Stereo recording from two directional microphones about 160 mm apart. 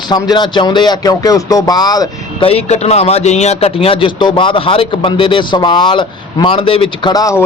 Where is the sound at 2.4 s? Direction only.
40° left (ahead or behind); by 7.4 s 20° left (ahead or behind).